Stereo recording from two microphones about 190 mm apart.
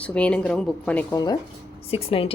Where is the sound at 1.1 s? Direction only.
20° left (ahead or behind).